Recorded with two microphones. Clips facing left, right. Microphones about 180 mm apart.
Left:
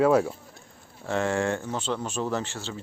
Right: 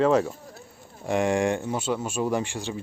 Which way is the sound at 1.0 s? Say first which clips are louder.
Right 3 dB; 15° right (ahead or behind).